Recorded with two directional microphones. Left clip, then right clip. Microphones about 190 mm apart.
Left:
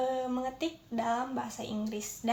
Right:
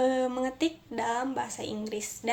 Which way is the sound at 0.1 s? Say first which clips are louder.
Right 4 dB; 30° right (ahead or behind).